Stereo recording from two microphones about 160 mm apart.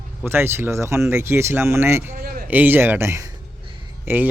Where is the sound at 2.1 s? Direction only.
75° right (ahead or behind).